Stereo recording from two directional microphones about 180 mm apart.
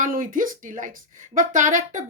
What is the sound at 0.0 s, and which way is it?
Speech, 50° right (ahead or behind).